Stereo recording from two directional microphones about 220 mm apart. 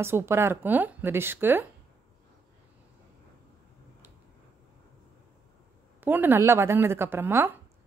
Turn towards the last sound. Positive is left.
turn(degrees=-10)  # may be behind; listen again after turning